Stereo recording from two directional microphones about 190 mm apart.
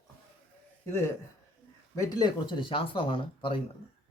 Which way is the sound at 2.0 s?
20° left (ahead or behind).